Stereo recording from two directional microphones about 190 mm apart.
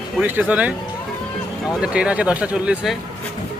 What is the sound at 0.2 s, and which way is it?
A man's voice, 10° right (ahead or behind).